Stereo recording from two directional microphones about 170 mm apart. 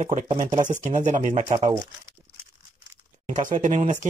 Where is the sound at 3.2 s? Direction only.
45° right (ahead or behind).